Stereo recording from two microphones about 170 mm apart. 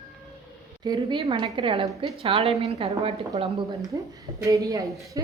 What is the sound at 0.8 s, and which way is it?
A woman's voice, 25° right (ahead or behind).